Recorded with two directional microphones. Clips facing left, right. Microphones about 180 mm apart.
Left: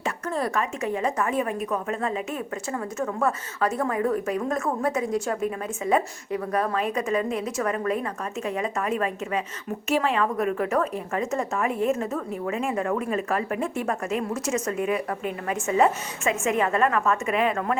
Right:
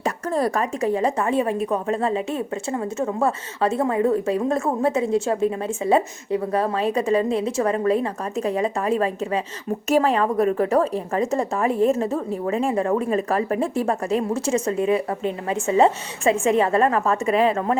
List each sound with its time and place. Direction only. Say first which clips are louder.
0.0 s a woman's voice: right 5 dB; 35° right (ahead or behind)